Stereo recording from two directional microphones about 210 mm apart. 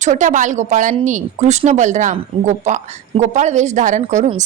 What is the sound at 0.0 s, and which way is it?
A woman's voice, 35° right (ahead or behind).